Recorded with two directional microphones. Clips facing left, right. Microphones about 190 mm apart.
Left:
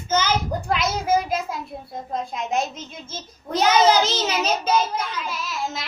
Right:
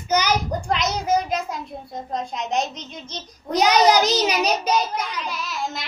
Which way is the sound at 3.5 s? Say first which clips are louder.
Right 1 dB; 15° right (ahead or behind).